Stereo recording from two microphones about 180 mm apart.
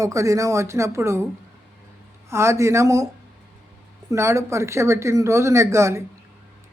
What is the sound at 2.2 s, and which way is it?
Speech, 15° right (ahead or behind).